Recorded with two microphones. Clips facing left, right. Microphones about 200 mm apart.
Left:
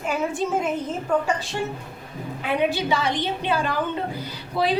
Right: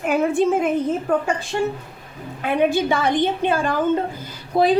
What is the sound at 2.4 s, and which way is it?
A child's voice, 50° right (ahead or behind).